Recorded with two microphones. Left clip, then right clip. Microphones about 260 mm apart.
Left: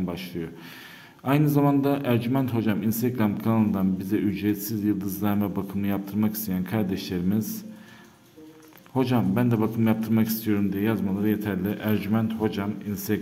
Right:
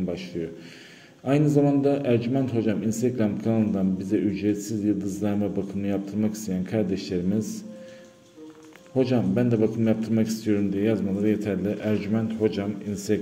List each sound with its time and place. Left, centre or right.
0.1 s a man's voice: centre
8.9 s a man's voice: centre